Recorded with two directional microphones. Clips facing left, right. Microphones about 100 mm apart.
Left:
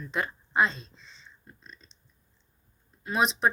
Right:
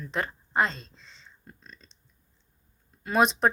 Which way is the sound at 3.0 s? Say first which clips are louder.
Right 3 dB; 60° right (ahead or behind).